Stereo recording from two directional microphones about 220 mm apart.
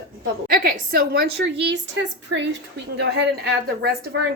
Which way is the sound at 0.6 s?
40° right (ahead or behind).